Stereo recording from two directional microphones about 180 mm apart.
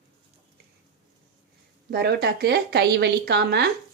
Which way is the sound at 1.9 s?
65° right (ahead or behind).